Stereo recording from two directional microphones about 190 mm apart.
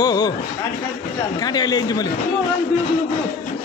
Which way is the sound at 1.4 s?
20° left (ahead or behind).